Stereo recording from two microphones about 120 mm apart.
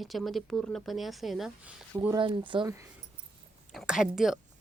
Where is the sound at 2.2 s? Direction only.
45° right (ahead or behind).